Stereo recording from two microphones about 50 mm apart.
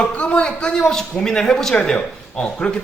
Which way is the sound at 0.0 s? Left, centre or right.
Left.